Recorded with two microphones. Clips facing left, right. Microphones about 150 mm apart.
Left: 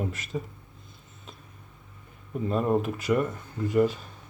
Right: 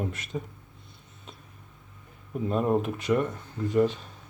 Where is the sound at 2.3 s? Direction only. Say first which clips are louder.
Even; centre (ahead or behind).